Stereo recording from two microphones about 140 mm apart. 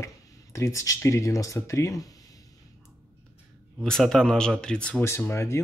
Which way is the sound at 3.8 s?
5° left (ahead or behind).